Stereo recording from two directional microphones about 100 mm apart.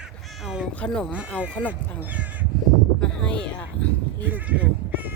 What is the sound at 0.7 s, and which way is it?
Speech, 10° left (ahead or behind).